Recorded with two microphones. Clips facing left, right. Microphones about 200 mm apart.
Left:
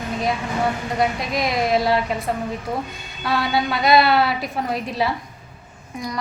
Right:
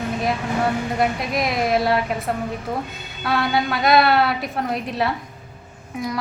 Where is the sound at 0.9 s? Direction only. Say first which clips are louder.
Even; centre (ahead or behind).